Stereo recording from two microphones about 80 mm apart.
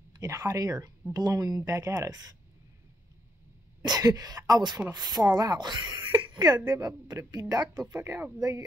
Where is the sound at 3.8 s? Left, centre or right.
Right.